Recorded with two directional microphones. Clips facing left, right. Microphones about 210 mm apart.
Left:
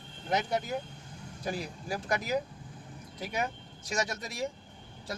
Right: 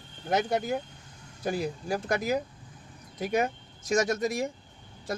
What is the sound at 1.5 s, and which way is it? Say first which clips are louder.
Speech: right 6 dB; 50° right (ahead or behind).